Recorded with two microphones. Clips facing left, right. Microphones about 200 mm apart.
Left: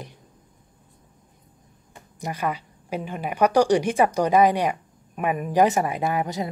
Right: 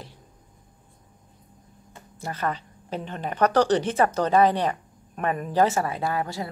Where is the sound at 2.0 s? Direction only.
15° left (ahead or behind).